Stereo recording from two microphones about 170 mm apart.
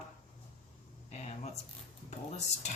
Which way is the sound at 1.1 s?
40° left (ahead or behind).